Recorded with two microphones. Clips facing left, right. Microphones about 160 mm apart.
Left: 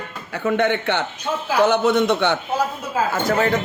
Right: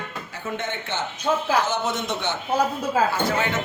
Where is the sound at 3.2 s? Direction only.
40° left (ahead or behind).